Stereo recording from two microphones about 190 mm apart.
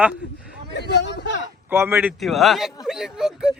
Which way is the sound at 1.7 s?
10° right (ahead or behind).